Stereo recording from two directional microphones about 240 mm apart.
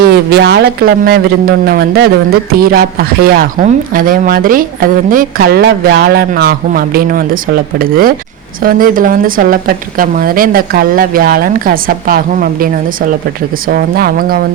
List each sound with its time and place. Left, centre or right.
0.0 s speech: right